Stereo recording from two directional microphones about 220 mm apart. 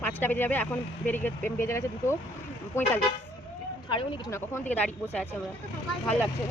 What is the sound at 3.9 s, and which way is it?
Speech, 20° left (ahead or behind).